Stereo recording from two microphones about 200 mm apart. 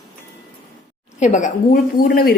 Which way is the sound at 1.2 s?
40° left (ahead or behind).